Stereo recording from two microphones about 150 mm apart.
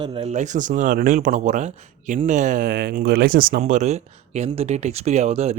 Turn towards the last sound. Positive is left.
turn(degrees=-45)  # may be behind; listen again after turning